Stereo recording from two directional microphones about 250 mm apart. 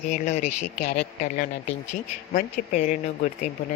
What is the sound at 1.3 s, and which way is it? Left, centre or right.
Speech, left.